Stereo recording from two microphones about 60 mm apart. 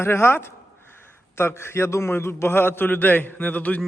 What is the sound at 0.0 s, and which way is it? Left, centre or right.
A man's voice, left.